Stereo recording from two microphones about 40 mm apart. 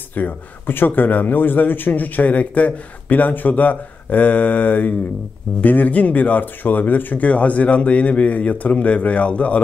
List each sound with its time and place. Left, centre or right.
0.1 s speech: left
7.2 s a man's voice: left